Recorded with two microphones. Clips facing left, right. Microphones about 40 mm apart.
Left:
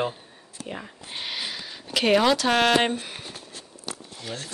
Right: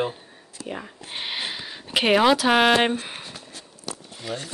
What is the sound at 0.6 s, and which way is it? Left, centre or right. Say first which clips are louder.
Speech: right 3 dB; centre.